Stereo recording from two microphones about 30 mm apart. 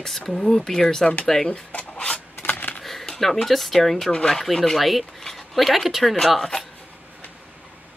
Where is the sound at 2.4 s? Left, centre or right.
Left.